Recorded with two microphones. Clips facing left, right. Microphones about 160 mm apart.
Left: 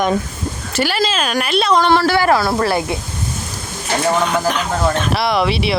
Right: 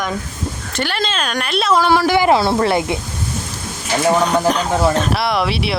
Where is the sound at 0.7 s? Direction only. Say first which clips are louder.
Left 4 dB; 5° left (ahead or behind); by 3.0 s 20° right (ahead or behind).